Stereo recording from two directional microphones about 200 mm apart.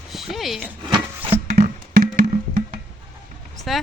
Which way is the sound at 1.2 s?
10° right (ahead or behind).